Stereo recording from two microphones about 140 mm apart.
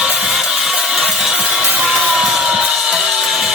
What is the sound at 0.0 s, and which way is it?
Music, 5° right (ahead or behind).